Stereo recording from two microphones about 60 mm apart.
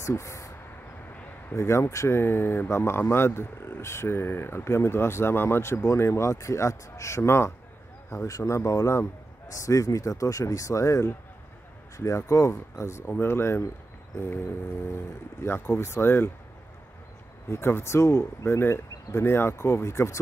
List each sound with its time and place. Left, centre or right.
0.0 s speech: left
1.5 s speech: left
2.1 s speech: left
8.3 s speech: left
13.1 s speech: left
17.5 s speech: left